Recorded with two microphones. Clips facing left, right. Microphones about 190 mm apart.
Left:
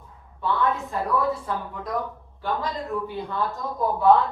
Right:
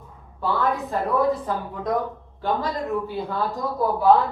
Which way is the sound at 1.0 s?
25° right (ahead or behind).